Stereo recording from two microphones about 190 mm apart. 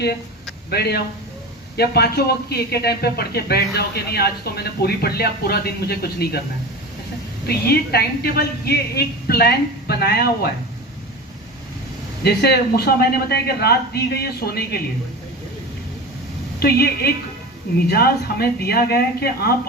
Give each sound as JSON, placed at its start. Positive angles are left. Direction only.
{"t": 0.7, "sound": "a man's voice", "side_deg": 55}
{"t": 7.4, "sound": "a man's voice", "side_deg": 55}
{"t": 12.2, "sound": "a man's voice", "side_deg": 60}
{"t": 16.6, "sound": "a man's voice", "side_deg": 55}